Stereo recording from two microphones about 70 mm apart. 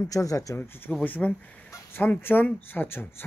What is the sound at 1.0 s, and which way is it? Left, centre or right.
Speech, left.